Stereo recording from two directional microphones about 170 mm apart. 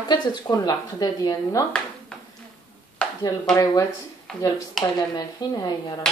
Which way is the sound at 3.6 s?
20° left (ahead or behind).